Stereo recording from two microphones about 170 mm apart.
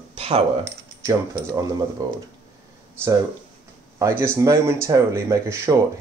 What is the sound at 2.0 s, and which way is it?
Speech, 20° right (ahead or behind).